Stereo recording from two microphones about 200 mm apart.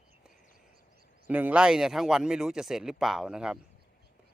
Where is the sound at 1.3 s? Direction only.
10° right (ahead or behind).